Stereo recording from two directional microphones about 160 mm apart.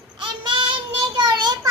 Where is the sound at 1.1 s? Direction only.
25° right (ahead or behind).